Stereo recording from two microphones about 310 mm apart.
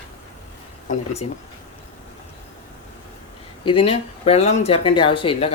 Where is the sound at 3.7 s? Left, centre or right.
Centre.